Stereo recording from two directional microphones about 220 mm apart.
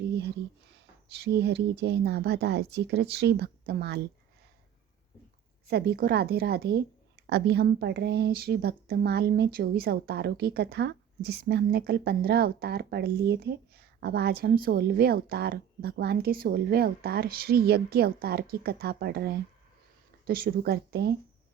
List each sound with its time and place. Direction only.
1.1 s speech: 50° right (ahead or behind)
5.6 s speech: 45° right (ahead or behind)